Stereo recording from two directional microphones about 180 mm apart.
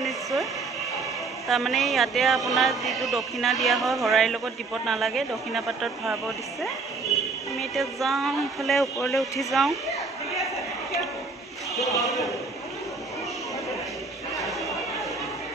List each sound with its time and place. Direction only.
0.0 s a sound: centre (ahead or behind)
1.5 s speech: centre (ahead or behind)
7.7 s speech: centre (ahead or behind)
11.8 s speech: centre (ahead or behind)